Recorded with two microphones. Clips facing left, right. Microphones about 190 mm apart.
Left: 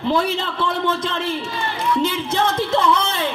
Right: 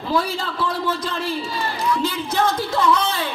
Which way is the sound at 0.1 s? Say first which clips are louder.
Left 1 dB; 25° left (ahead or behind).